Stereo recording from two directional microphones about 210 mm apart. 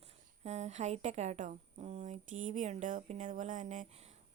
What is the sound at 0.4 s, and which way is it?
Speech, 30° right (ahead or behind).